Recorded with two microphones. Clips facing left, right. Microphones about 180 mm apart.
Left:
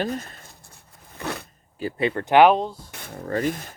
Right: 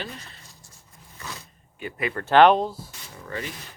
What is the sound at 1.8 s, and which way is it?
Speech, 30° left (ahead or behind).